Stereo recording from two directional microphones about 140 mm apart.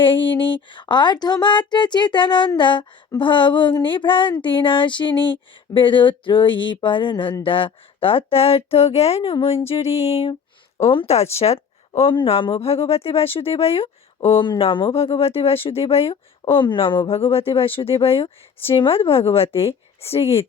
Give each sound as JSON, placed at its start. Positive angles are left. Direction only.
{"t": 0.0, "sound": "speech", "side_deg": 35}